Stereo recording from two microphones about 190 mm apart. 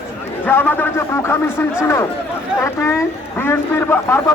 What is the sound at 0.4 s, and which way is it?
A man's voice, 10° left (ahead or behind).